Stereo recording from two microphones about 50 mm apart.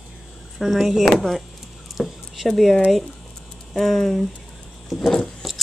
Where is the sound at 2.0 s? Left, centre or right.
Centre.